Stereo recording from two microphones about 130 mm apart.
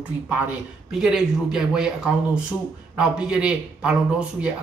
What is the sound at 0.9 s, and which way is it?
Speech, 5° right (ahead or behind).